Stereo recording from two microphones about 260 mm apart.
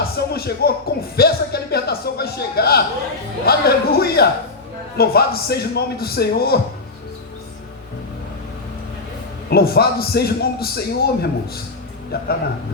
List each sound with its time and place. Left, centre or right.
0.0 s a man's voice: left
9.5 s a man's voice: left